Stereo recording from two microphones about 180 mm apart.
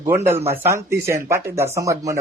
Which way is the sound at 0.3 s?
10° right (ahead or behind).